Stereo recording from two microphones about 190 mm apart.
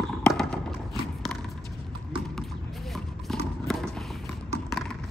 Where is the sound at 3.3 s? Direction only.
Centre (ahead or behind).